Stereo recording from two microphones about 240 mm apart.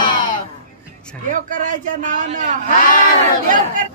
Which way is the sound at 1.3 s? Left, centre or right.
Right.